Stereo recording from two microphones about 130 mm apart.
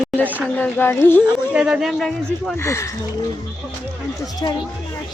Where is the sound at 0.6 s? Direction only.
15° left (ahead or behind).